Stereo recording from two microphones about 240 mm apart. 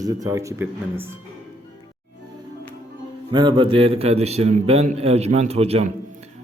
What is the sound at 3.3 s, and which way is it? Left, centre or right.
A man's voice, centre.